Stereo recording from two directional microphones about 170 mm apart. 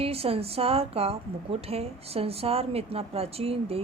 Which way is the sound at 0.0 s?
35° right (ahead or behind).